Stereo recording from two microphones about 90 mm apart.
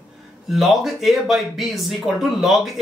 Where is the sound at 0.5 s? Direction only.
Centre (ahead or behind).